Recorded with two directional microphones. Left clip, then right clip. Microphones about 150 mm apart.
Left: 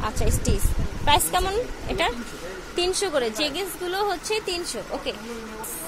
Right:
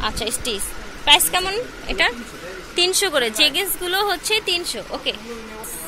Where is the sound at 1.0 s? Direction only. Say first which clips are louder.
Right 5 dB; 15° left (ahead or behind); by 5.1 s centre (ahead or behind).